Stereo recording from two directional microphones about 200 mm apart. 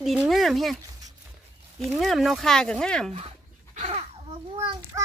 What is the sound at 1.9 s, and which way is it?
A child's voice, centre (ahead or behind).